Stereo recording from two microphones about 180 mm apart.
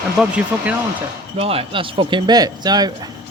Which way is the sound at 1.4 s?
30° right (ahead or behind).